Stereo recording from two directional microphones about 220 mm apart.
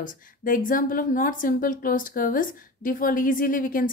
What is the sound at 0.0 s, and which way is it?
A woman's voice, 40° left (ahead or behind).